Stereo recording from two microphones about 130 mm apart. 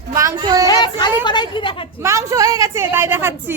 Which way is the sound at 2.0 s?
25° right (ahead or behind).